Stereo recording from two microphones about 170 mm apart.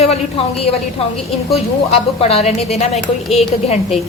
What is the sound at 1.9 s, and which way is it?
A woman's voice, 35° left (ahead or behind).